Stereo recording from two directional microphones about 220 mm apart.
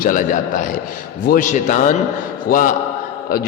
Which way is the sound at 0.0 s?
35° left (ahead or behind).